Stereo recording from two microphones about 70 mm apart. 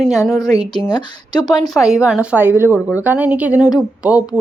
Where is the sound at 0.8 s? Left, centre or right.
Left.